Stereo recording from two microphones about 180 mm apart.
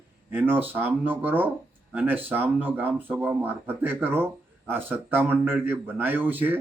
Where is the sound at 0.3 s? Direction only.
10° right (ahead or behind).